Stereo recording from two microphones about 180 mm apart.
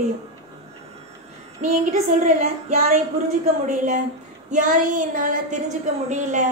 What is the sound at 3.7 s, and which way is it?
A woman's voice, 45° right (ahead or behind).